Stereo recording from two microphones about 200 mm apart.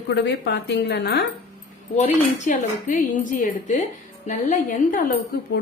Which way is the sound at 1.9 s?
40° left (ahead or behind).